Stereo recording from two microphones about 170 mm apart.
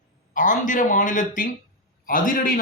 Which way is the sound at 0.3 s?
50° left (ahead or behind).